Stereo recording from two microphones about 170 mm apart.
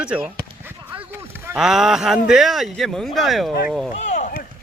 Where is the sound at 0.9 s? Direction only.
15° right (ahead or behind).